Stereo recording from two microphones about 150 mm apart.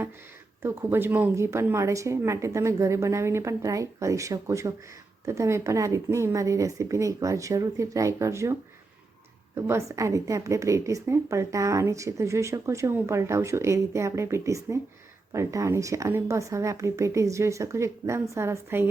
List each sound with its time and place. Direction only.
0.6 s a woman's voice: 15° right (ahead or behind)
9.6 s a woman's voice: 20° right (ahead or behind)